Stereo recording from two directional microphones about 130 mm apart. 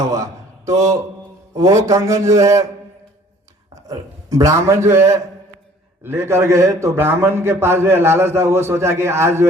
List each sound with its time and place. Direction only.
0.1 s a man's voice: 25° right (ahead or behind)
3.8 s a man's voice: 25° right (ahead or behind)